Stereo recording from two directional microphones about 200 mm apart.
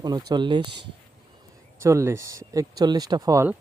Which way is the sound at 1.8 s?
15° right (ahead or behind).